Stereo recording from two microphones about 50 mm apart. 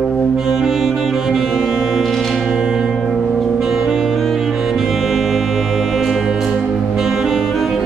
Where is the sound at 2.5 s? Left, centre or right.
Centre.